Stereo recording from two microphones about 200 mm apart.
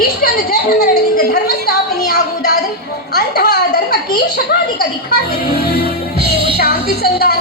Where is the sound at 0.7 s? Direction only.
50° left (ahead or behind).